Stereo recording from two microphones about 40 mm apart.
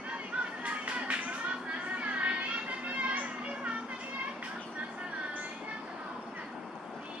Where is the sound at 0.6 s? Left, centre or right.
Right.